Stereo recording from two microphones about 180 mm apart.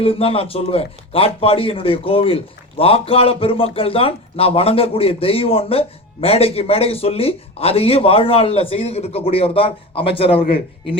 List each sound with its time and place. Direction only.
0.0 s a man's voice: 30° left (ahead or behind)